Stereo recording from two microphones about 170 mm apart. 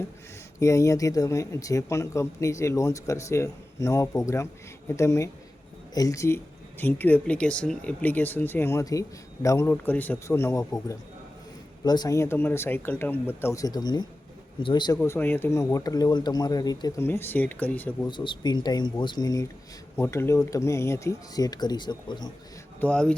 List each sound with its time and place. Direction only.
0.6 s speech: 20° left (ahead or behind)
15.0 s speech: 15° left (ahead or behind)
17.1 s speech: 15° left (ahead or behind)
18.1 s speech: 30° left (ahead or behind)
22.8 s speech: 5° left (ahead or behind)